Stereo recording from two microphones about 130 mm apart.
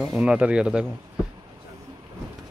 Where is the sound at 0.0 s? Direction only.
5° right (ahead or behind).